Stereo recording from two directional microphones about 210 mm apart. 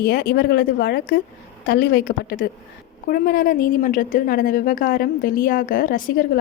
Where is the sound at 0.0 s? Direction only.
50° left (ahead or behind).